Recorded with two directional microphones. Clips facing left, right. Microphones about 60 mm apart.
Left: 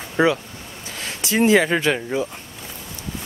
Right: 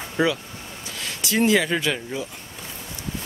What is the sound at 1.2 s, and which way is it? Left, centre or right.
Speech, left.